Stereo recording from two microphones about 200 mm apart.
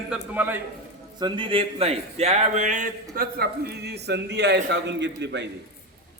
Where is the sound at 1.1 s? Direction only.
20° right (ahead or behind); by 5.5 s 60° right (ahead or behind).